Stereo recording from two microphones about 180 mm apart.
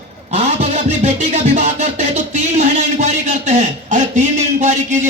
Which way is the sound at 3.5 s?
40° right (ahead or behind).